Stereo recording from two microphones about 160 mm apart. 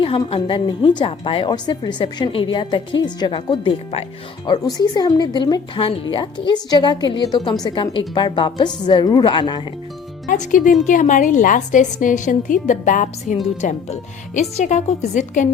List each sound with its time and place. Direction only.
0.0 s a woman's voice: 35° left (ahead or behind)
10.2 s a woman's voice: 50° left (ahead or behind)